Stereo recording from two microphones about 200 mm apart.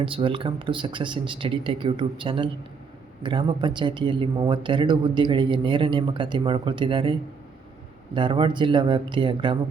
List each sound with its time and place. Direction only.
0.0 s speech: 25° right (ahead or behind)